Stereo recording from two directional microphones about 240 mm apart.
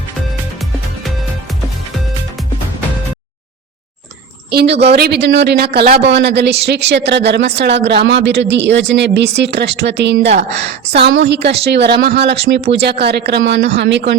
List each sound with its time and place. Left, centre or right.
4.5 s speech: right